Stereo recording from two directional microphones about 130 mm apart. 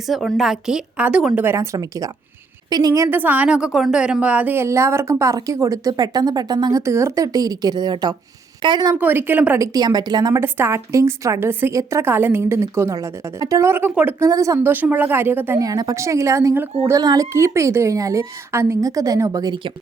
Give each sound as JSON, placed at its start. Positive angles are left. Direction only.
{"t": 0.1, "sound": "a woman's voice", "side_deg": 0}
{"t": 9.0, "sound": "a woman's voice", "side_deg": -15}
{"t": 9.6, "sound": "a woman's voice", "side_deg": -30}
{"t": 10.3, "sound": "a woman's voice", "side_deg": -20}
{"t": 15.6, "sound": "a woman's voice", "side_deg": -30}